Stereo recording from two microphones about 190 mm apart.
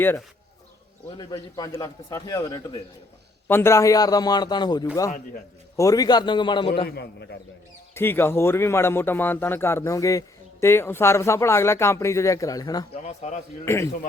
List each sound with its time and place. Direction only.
1.1 s a man's voice: 25° left (ahead or behind)
3.4 s a man's voice: 10° left (ahead or behind)
6.8 s a man's voice: 60° left (ahead or behind)
7.9 s a man's voice: 10° left (ahead or behind)
12.9 s a man's voice: 35° left (ahead or behind)
13.7 s a man's voice: 15° left (ahead or behind)